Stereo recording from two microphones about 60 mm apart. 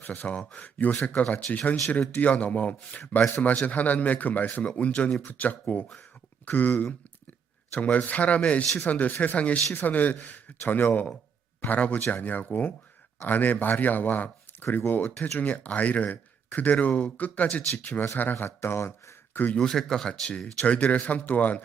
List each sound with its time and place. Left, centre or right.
0.0 s a man's voice: left
18.4 s speech: left
19.5 s speech: centre; by 21.6 s left